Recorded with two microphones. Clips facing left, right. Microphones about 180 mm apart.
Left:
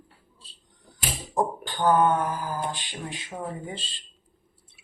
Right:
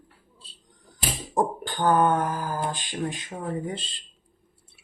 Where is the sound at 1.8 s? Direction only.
45° right (ahead or behind).